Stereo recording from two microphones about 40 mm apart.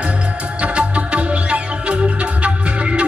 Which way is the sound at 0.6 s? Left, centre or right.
Right.